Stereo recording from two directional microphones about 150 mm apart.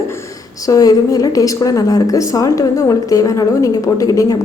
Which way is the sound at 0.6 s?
25° left (ahead or behind).